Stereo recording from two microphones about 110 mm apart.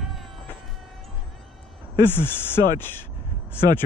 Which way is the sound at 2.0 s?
20° left (ahead or behind).